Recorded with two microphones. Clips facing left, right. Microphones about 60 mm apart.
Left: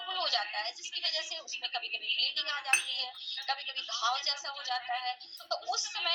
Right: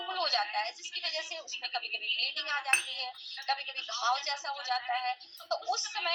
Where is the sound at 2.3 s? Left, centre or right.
Right.